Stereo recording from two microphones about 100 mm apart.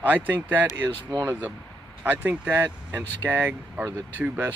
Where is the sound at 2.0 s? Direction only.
15° right (ahead or behind).